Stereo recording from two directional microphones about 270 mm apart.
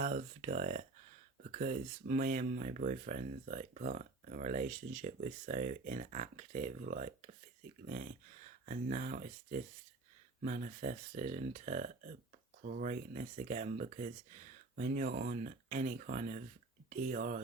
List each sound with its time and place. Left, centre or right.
0.0 s speech: right